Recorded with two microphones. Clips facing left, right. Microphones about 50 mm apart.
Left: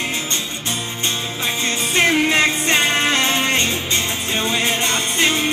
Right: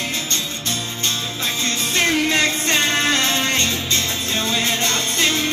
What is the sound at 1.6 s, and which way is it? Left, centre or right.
Music, left.